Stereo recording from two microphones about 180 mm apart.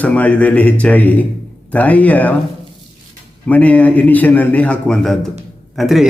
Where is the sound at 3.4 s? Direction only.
10° left (ahead or behind).